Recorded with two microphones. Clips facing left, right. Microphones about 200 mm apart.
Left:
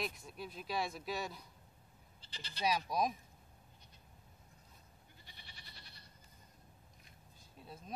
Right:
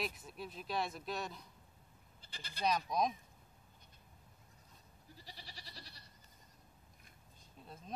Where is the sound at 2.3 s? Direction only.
50° right (ahead or behind).